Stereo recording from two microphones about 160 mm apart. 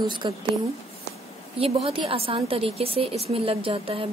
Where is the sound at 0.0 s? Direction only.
30° right (ahead or behind).